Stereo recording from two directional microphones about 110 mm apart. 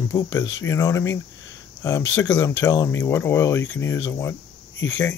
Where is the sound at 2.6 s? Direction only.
35° left (ahead or behind).